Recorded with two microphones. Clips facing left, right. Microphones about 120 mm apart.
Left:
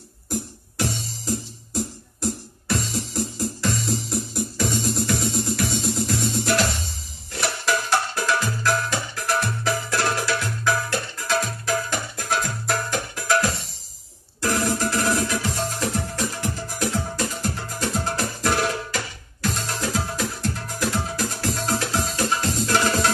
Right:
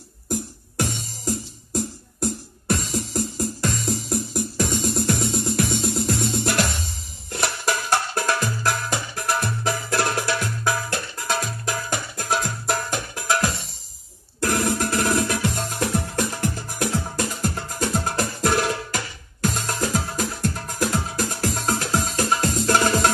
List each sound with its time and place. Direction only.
0.3 s music: 50° right (ahead or behind)
11.9 s music: 45° right (ahead or behind)